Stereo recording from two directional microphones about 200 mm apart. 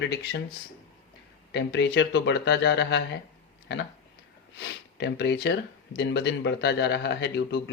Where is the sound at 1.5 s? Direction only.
60° left (ahead or behind).